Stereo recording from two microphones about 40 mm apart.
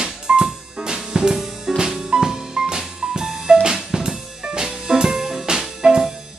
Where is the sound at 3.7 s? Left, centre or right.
Centre.